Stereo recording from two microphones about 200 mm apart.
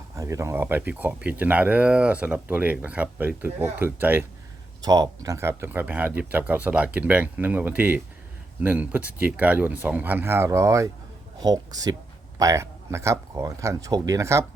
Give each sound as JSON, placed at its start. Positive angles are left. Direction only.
{"t": 0.2, "sound": "speech", "side_deg": -15}